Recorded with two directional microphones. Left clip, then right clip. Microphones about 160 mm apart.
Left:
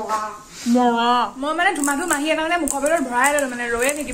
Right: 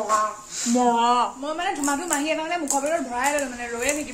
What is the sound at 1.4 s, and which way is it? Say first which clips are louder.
A woman's voice: left 6 dB; 10° left (ahead or behind).